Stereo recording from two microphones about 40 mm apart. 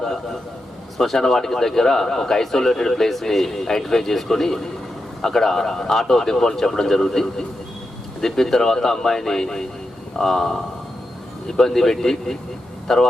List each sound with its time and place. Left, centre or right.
0.0 s a man's voice: centre